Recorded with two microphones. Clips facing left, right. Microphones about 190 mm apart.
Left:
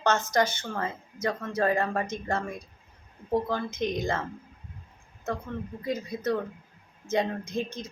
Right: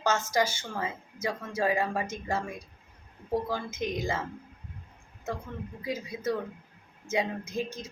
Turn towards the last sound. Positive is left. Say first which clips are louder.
# left 2 dB
turn(degrees=-10)  # may be behind; listen again after turning